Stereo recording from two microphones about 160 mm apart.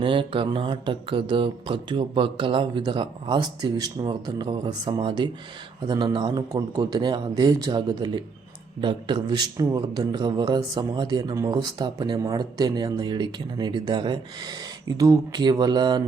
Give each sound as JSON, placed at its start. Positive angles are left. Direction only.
{"t": 0.0, "sound": "speech", "side_deg": -30}